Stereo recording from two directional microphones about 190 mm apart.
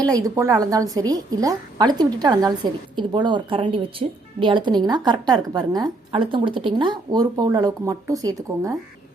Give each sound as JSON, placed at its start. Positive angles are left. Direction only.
{"t": 0.0, "sound": "a woman's voice", "side_deg": -20}